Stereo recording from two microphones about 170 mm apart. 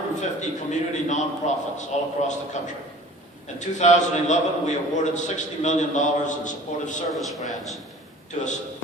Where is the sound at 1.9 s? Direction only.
40° left (ahead or behind).